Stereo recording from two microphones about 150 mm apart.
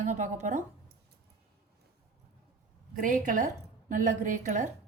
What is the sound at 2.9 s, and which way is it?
A woman's voice, 60° right (ahead or behind).